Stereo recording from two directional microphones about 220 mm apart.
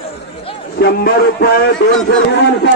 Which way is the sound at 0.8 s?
45° left (ahead or behind).